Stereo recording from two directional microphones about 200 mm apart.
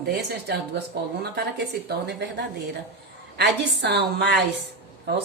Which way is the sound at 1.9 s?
55° right (ahead or behind).